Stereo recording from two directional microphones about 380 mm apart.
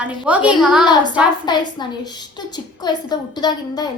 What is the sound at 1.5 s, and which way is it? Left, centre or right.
A woman's voice, centre.